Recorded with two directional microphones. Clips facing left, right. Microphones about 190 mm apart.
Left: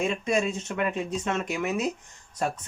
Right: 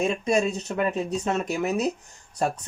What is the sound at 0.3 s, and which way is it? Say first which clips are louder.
Speech: right 3 dB; 40° right (ahead or behind).